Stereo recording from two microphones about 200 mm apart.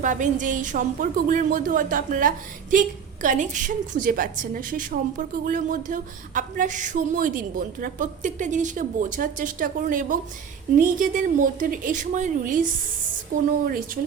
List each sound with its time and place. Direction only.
0.0 s a woman's voice: 40° right (ahead or behind)